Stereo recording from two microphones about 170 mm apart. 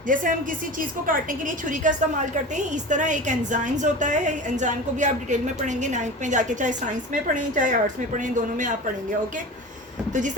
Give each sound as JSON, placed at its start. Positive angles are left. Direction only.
{"t": 0.1, "sound": "a woman's voice", "side_deg": -50}
{"t": 10.1, "sound": "speech", "side_deg": -45}